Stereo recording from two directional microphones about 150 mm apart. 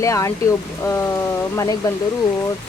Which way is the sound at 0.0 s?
20° left (ahead or behind).